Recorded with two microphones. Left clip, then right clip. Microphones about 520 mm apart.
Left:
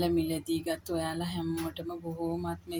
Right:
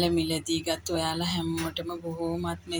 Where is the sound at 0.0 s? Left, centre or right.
Left.